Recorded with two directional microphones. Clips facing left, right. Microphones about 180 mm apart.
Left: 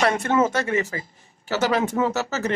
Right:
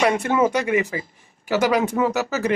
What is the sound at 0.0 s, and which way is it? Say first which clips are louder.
Speech: right 1 dB; 10° right (ahead or behind).